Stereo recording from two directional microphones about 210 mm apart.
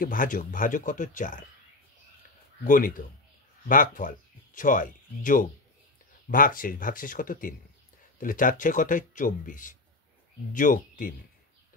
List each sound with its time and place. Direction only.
0.0 s speech: 40° left (ahead or behind)
2.6 s speech: 40° left (ahead or behind)